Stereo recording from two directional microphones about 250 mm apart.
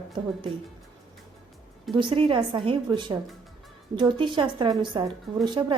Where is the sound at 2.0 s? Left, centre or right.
Centre.